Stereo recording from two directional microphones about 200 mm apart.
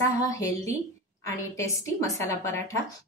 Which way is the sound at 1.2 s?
15° left (ahead or behind).